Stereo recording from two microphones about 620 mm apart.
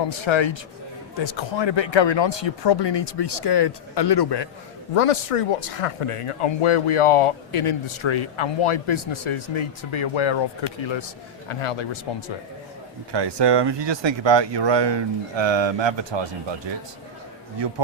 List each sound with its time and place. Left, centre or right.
0.1 s speech: left
4.9 s speech: left
13.1 s speech: right